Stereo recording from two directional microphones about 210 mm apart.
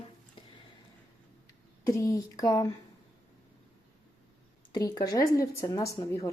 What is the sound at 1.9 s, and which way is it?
Speech, 15° left (ahead or behind).